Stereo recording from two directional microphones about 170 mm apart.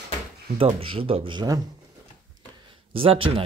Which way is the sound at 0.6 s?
30° right (ahead or behind).